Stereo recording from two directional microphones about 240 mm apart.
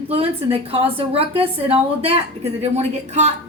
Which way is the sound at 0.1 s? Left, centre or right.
Right.